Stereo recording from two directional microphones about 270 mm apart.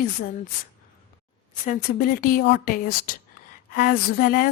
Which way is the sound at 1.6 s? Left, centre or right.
Left.